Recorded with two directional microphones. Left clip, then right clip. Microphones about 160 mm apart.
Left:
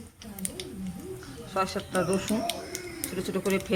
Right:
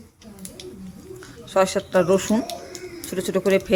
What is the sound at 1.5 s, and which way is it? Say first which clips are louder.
Speech: right 10 dB; 55° right (ahead or behind).